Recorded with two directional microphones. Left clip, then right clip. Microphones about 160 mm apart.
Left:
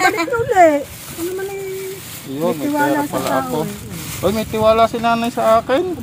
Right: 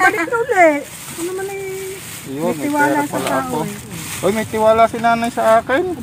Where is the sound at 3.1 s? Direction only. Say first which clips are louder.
Even; 15° left (ahead or behind).